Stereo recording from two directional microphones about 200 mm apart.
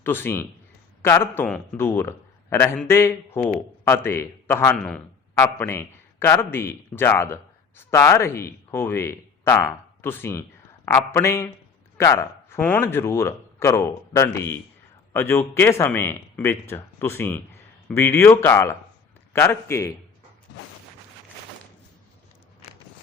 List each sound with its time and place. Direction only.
0.0 s a man's voice: 10° left (ahead or behind)